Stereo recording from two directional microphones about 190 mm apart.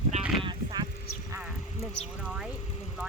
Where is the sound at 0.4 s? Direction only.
20° right (ahead or behind).